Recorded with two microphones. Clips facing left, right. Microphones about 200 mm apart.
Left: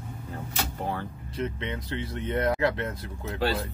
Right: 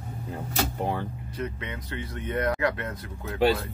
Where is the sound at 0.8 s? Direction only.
15° right (ahead or behind).